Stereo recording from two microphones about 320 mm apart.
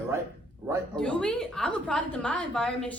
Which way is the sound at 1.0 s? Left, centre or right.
Centre.